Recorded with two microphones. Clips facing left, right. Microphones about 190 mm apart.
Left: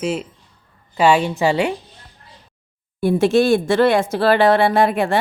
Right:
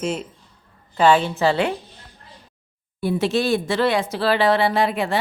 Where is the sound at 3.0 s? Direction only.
50° left (ahead or behind).